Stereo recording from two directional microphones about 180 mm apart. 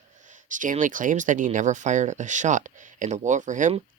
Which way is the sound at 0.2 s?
45° right (ahead or behind).